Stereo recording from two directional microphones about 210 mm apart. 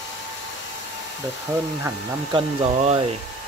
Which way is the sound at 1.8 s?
20° right (ahead or behind).